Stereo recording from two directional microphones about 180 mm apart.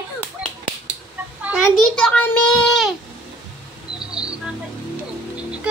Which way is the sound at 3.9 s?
5° right (ahead or behind).